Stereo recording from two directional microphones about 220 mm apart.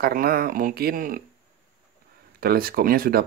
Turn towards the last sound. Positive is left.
turn(degrees=-40)  # may be behind; listen again after turning